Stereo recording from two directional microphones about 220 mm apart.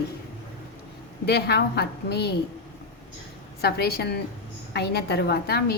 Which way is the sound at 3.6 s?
45° left (ahead or behind).